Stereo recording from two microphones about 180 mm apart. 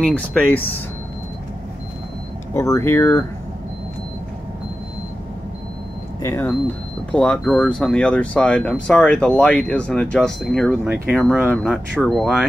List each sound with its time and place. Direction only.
0.1 s speech: 10° left (ahead or behind)
2.5 s speech: 15° left (ahead or behind)
6.2 s speech: 15° left (ahead or behind); by 12.4 s centre (ahead or behind)